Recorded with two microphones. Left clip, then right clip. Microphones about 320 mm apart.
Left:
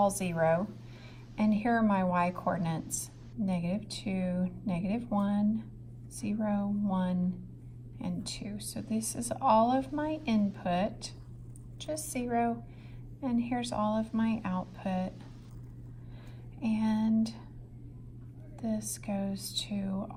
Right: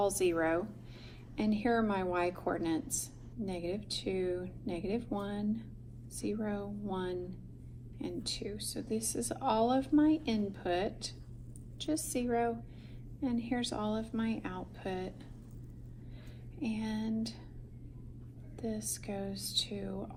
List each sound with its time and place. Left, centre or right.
0.1 s a woman's voice: left
1.4 s a woman's voice: left
16.6 s a woman's voice: left
18.5 s a woman's voice: left